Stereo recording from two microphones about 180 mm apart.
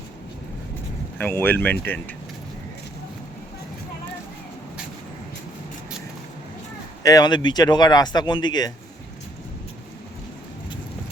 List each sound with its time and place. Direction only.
1.2 s speech: 10° left (ahead or behind)
7.0 s speech: 20° left (ahead or behind)